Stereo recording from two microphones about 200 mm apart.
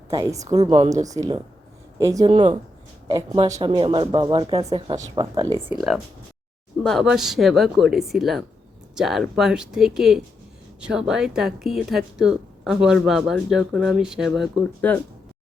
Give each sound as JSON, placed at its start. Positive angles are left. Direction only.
{"t": 0.1, "sound": "a woman's voice", "side_deg": -15}
{"t": 6.8, "sound": "speech", "side_deg": 0}